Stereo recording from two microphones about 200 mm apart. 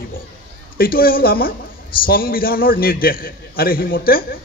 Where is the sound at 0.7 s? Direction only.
50° left (ahead or behind).